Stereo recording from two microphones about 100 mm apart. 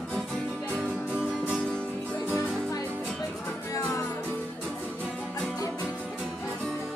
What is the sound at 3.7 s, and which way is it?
Music, 35° left (ahead or behind).